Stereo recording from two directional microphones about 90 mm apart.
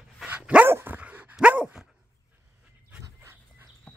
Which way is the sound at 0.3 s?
15° right (ahead or behind).